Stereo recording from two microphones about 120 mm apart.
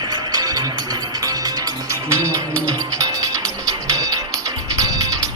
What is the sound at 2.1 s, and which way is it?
Music, 25° right (ahead or behind).